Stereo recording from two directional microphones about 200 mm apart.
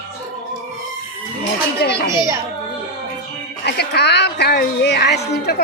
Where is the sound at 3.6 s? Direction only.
55° left (ahead or behind).